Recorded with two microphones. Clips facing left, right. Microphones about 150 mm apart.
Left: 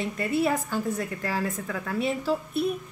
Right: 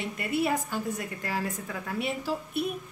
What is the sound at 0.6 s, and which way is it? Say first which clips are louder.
A woman's voice: left 4 dB; 15° right (ahead or behind).